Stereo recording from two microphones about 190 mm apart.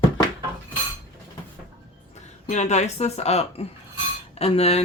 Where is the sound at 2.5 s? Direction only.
35° left (ahead or behind).